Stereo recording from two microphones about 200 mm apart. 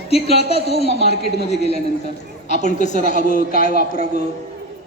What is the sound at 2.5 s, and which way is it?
A woman's voice, 35° left (ahead or behind).